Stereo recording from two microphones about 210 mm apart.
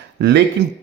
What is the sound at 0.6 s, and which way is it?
Speech, 55° right (ahead or behind).